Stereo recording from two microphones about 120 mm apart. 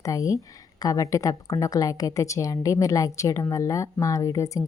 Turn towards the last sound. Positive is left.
turn(degrees=30)  # may be behind; listen again after turning